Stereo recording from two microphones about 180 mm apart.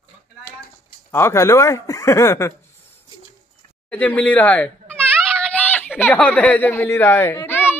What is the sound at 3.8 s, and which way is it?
A child's voice, 10° left (ahead or behind).